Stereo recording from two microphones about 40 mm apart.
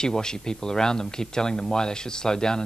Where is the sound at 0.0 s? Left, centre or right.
Centre.